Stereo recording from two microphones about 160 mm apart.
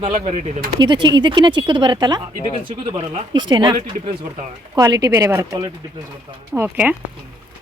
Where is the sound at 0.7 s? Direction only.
30° right (ahead or behind); by 7.0 s 10° right (ahead or behind).